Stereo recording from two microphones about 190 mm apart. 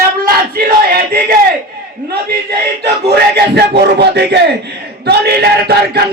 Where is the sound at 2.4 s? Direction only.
60° right (ahead or behind).